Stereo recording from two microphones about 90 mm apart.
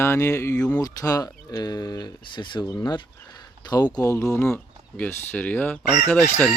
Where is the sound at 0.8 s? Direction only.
40° left (ahead or behind).